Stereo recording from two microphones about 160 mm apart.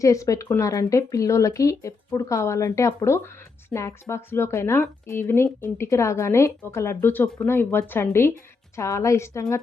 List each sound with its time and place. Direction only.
0.0 s speech: 20° left (ahead or behind)